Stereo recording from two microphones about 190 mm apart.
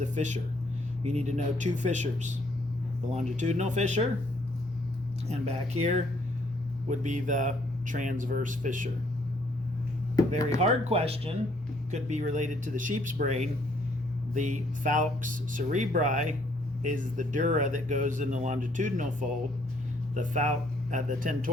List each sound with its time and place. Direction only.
0.0 s speech: 40° right (ahead or behind)
5.3 s speech: 35° right (ahead or behind)
10.6 s speech: 35° right (ahead or behind)
20.1 s speech: 40° right (ahead or behind)